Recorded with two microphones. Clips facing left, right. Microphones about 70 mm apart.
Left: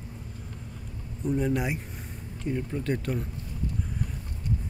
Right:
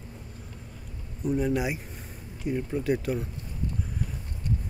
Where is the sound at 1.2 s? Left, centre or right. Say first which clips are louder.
Right 1 dB; centre.